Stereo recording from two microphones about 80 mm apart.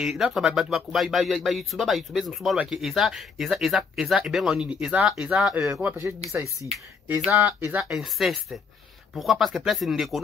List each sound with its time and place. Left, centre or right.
0.0 s speech: centre
6.3 s speech: right
7.9 s speech: centre